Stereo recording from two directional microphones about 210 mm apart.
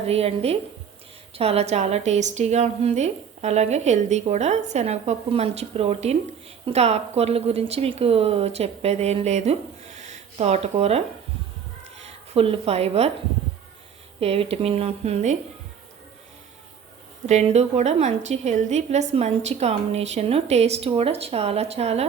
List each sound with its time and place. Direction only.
0.0 s a woman's voice: 30° right (ahead or behind)
14.2 s speech: 30° right (ahead or behind)
17.2 s a woman's voice: 30° right (ahead or behind)